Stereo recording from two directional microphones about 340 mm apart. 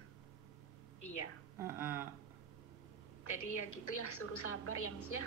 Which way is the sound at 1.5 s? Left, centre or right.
Centre.